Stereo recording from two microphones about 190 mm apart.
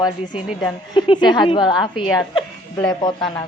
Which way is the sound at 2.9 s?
20° left (ahead or behind).